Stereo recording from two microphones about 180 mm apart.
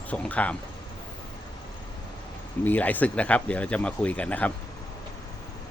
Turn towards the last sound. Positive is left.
turn(degrees=5)  # may be behind; listen again after turning